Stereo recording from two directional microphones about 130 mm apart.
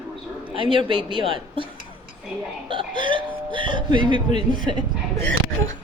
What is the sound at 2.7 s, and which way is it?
Speech, 40° right (ahead or behind).